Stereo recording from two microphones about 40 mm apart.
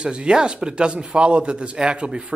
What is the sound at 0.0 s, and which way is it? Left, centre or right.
A man's voice, right.